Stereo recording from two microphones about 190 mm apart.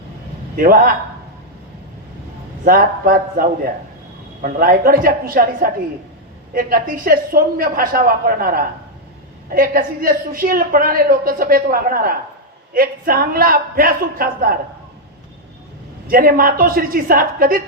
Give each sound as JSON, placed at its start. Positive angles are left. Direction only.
{"t": 0.5, "sound": "a woman's voice", "side_deg": -50}
{"t": 2.6, "sound": "a woman's voice", "side_deg": -50}
{"t": 16.0, "sound": "a woman's voice", "side_deg": -50}